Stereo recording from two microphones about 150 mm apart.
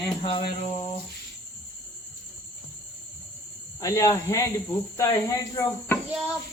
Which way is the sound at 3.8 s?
20° left (ahead or behind).